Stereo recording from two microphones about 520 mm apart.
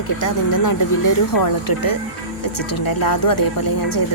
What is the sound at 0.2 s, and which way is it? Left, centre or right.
A woman's voice, left.